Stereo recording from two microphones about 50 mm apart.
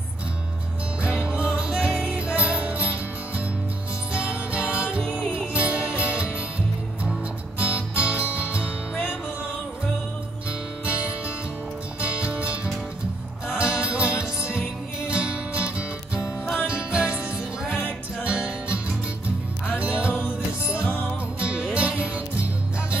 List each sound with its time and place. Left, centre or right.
1.0 s music: right
12.0 s music: right